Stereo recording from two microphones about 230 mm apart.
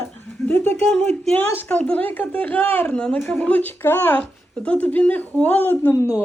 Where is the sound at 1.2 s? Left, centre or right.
Centre.